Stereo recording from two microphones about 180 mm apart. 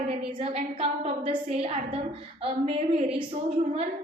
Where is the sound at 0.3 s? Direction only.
30° right (ahead or behind).